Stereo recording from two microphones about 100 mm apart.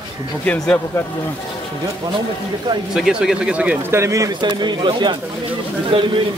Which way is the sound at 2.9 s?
5° right (ahead or behind).